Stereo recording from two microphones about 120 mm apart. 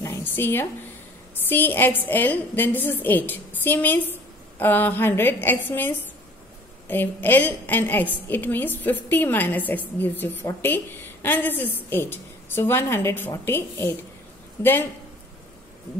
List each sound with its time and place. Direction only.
0.0 s a woman's voice: 20° left (ahead or behind)